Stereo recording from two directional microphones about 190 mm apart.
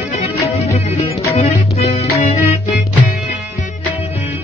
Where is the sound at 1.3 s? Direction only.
35° left (ahead or behind).